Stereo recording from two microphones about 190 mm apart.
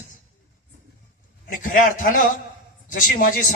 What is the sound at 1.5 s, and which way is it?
Speech, 45° left (ahead or behind).